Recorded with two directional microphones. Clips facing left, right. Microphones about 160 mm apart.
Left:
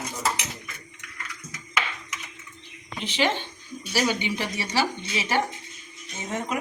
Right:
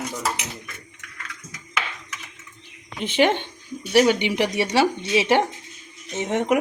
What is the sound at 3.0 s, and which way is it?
Speech, 55° right (ahead or behind).